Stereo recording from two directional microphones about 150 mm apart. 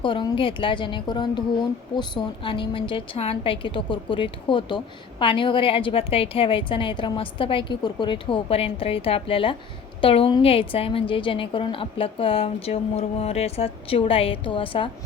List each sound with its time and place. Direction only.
0.0 s a woman's voice: 35° left (ahead or behind)